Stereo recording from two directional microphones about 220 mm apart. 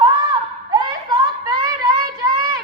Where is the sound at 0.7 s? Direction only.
20° right (ahead or behind).